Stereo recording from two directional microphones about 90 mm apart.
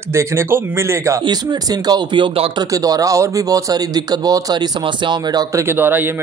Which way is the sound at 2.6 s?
40° right (ahead or behind).